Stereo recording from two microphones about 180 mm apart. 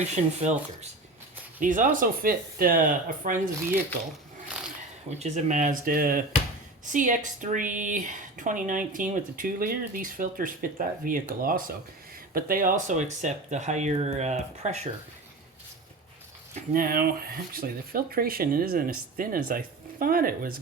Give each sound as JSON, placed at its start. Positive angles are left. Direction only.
{"t": 0.0, "sound": "speech", "side_deg": -40}
{"t": 5.0, "sound": "speech", "side_deg": -40}
{"t": 16.6, "sound": "speech", "side_deg": -50}